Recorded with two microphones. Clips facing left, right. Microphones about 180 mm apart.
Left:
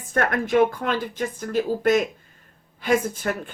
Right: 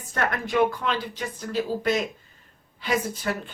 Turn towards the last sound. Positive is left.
turn(degrees=50)  # may be behind; listen again after turning